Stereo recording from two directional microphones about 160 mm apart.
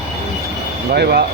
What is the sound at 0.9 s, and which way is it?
Speech, 85° right.